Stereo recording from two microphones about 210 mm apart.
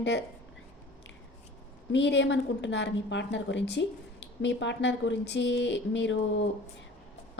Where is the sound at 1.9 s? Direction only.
60° left (ahead or behind).